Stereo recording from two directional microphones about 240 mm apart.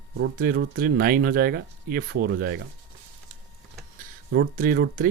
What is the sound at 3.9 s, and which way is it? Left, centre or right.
Speech, right.